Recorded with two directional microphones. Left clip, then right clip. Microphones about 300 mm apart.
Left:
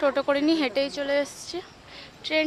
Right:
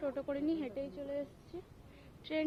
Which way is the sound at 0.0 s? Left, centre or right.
Centre.